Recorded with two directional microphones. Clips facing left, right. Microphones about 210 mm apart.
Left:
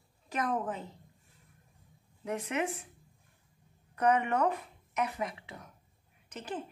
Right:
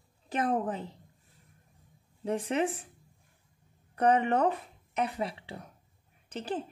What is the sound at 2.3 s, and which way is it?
Speech, 30° right (ahead or behind).